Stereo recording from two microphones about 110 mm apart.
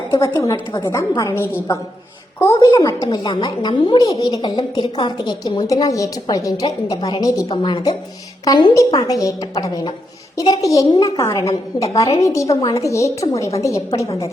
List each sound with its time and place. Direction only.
0.3 s a woman's voice: 35° left (ahead or behind)
5.6 s a woman's voice: 30° left (ahead or behind)
7.5 s a woman's voice: 45° left (ahead or behind)